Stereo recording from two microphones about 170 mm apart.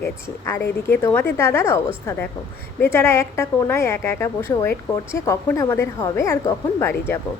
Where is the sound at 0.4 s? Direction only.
15° left (ahead or behind).